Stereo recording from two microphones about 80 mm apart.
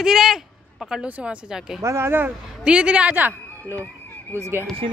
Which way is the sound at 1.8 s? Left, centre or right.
Right.